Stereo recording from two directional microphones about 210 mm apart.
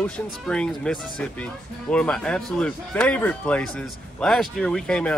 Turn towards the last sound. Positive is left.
turn(degrees=5)  # may be behind; listen again after turning